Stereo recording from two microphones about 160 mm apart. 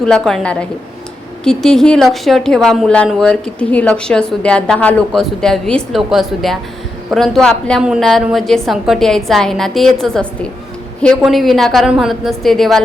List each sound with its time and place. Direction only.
0.0 s a woman's voice: 5° left (ahead or behind)